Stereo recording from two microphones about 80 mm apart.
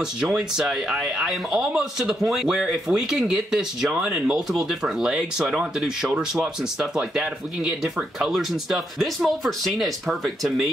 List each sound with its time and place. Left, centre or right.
0.0 s speech: centre